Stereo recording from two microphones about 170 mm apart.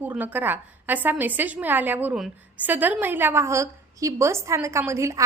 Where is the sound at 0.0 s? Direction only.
10° right (ahead or behind).